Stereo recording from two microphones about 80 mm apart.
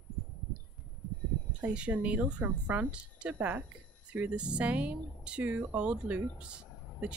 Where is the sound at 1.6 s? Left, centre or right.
Centre.